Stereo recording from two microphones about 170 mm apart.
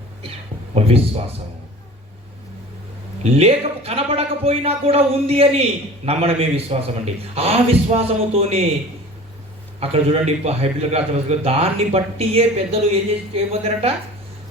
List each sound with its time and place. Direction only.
0.7 s a man's voice: 35° right (ahead or behind)
3.3 s a man's voice: 35° right (ahead or behind)
9.8 s a man's voice: 35° right (ahead or behind)